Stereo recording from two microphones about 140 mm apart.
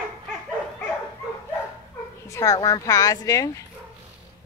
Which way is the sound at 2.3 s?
25° left (ahead or behind).